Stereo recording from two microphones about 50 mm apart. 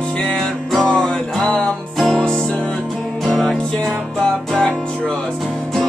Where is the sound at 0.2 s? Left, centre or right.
Centre.